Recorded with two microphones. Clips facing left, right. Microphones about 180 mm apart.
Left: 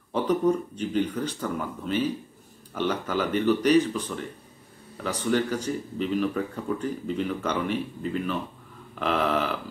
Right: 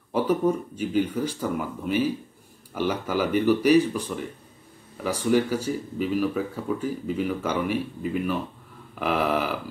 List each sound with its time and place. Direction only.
0.1 s speech: 10° right (ahead or behind)